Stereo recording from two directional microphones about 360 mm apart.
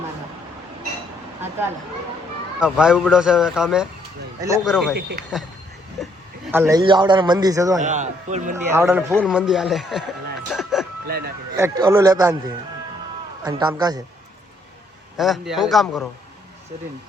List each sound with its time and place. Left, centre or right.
2.6 s speech: centre
4.9 s a man's voice: right
6.5 s a man's voice: centre
7.8 s a man's voice: centre
8.5 s speech: centre
10.5 s a sound: centre
11.0 s a sound: right
11.5 s a man's voice: centre
15.2 s speech: centre